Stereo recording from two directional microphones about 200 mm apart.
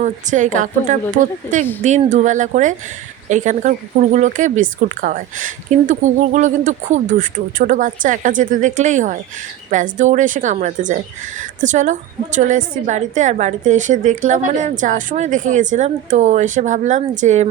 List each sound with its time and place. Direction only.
0.0 s a woman's voice: 40° right (ahead or behind)